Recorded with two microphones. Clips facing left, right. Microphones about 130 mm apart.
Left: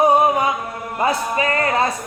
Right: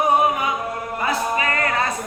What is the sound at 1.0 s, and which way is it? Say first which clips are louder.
Music: left 3 dB; 30° left (ahead or behind).